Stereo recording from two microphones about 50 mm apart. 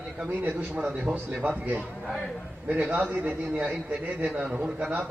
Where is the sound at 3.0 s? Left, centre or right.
Right.